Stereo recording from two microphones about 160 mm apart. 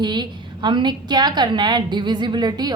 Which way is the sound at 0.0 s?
30° right (ahead or behind).